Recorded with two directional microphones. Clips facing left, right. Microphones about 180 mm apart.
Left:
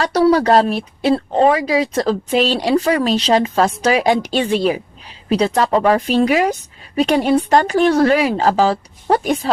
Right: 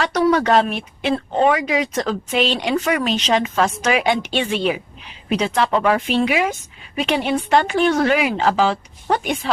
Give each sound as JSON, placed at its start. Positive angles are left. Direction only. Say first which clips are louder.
{"t": 0.0, "sound": "speech", "louder": "left 3 dB", "side_deg": 35}